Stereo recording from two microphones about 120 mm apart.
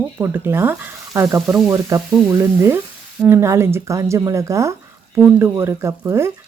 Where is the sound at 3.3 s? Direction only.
20° right (ahead or behind).